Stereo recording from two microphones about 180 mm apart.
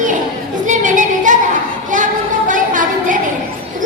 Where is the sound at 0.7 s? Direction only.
45° right (ahead or behind).